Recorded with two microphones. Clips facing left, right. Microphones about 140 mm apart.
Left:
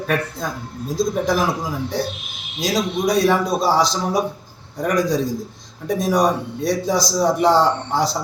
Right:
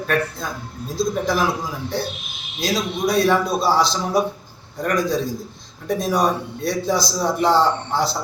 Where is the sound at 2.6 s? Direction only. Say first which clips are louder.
Left 2 dB; 15° left (ahead or behind).